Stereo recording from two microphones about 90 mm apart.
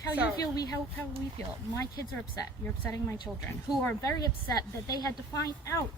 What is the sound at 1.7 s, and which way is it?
Speech, 45° left (ahead or behind).